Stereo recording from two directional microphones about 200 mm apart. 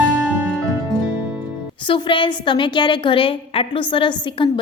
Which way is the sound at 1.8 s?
25° left (ahead or behind).